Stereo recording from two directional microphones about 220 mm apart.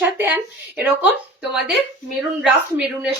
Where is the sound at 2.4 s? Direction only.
5° right (ahead or behind).